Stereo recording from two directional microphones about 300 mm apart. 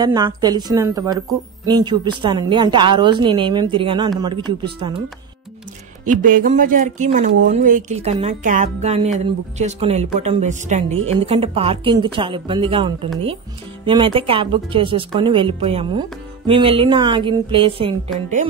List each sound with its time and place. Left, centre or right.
0.0 s a woman's voice: centre
6.0 s a woman's voice: right